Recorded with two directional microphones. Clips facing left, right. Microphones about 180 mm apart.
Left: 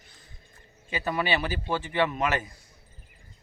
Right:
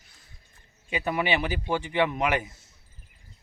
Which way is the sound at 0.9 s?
15° right (ahead or behind).